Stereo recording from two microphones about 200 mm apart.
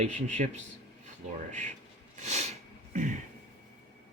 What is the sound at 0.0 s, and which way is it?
Speech, 35° right (ahead or behind).